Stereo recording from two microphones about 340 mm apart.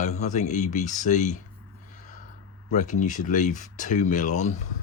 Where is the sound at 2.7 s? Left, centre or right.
Left.